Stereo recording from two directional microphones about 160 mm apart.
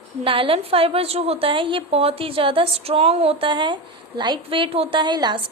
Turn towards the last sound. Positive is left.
turn(degrees=-25)  # may be behind; listen again after turning